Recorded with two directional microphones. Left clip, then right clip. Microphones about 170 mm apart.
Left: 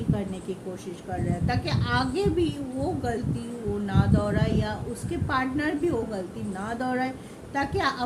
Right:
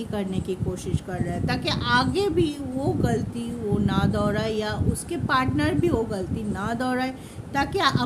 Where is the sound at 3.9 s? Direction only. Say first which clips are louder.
Even; 50° right (ahead or behind).